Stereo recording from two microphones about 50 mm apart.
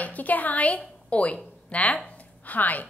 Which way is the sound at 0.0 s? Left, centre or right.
Left.